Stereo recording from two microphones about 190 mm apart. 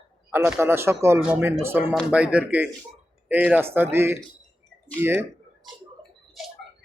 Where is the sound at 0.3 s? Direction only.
10° right (ahead or behind).